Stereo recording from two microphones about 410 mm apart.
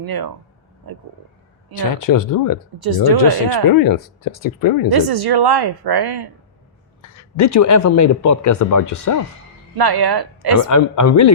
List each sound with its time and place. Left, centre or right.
0.0 s a woman's voice: right
2.0 s speech: left
2.7 s a woman's voice: right
3.7 s speech: left
4.9 s a woman's voice: right
7.3 s speech: left
9.7 s a woman's voice: right
10.7 s speech: left